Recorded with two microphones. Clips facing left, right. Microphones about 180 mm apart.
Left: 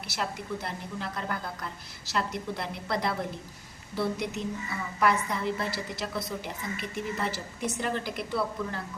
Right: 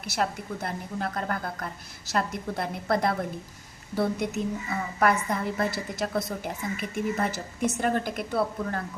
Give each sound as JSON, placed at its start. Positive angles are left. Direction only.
{"t": 0.1, "sound": "a woman's voice", "side_deg": -50}